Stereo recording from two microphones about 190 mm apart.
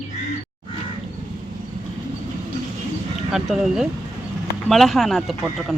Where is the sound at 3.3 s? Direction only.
5° right (ahead or behind).